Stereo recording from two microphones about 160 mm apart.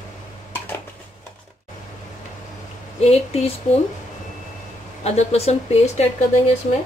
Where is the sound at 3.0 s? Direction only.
40° left (ahead or behind).